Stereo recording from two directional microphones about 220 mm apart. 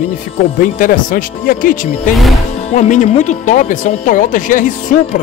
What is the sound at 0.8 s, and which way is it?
Speech, 40° left (ahead or behind).